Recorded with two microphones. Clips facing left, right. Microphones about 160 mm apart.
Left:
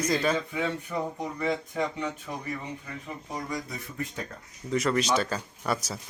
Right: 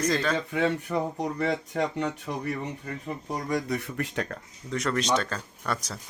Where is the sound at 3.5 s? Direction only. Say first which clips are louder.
Right 7 dB; 70° right (ahead or behind).